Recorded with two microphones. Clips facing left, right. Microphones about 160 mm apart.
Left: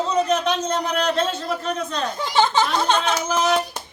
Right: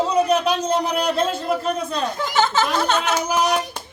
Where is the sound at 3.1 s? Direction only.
10° right (ahead or behind).